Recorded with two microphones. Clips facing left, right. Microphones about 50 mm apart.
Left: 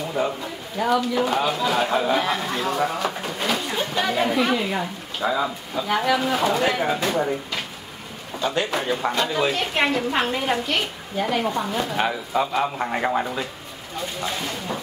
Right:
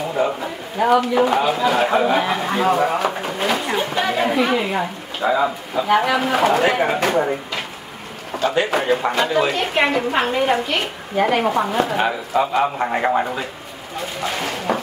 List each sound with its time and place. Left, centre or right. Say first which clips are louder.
0.4 s a woman's voice: right 5 dB; right
1.2 s a woman's voice: right 5 dB; centre; by 7.0 s right
8.3 s a sound: right 5 dB; right
8.6 s a woman's voice: right 6 dB; right
9.0 s speech: right 4 dB; centre
11.1 s a woman's voice: right 6 dB; right
12.0 s speech: right 4 dB; centre
14.2 s speech: right 8 dB; right